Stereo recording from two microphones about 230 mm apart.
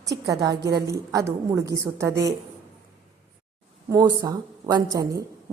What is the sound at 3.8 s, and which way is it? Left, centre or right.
A woman's voice, centre.